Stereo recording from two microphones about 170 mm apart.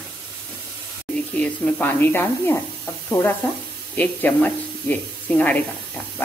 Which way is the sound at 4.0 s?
10° left (ahead or behind).